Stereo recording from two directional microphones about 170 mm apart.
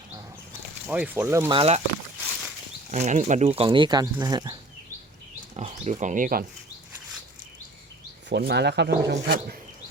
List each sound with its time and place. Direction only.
0.9 s speech: 10° right (ahead or behind)
1.5 s speech: 35° right (ahead or behind)
2.9 s speech: 45° right (ahead or behind); by 4.5 s 25° right (ahead or behind)
5.5 s speech: 40° right (ahead or behind)
8.3 s speech: 75° right (ahead or behind)
9.2 s speech: 65° right (ahead or behind)